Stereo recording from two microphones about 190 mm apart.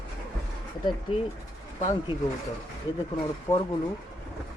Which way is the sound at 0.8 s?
25° left (ahead or behind).